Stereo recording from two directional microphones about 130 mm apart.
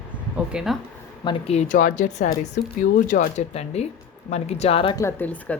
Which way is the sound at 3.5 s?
55° left (ahead or behind).